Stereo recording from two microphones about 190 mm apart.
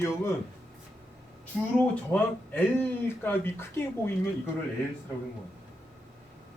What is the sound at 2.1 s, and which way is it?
Speech, 10° left (ahead or behind).